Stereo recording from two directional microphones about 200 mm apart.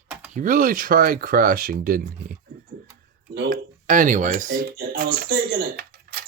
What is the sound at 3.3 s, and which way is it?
Speech, 45° right (ahead or behind).